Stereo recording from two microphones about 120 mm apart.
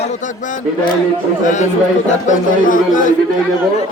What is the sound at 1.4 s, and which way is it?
Speech, 90° left.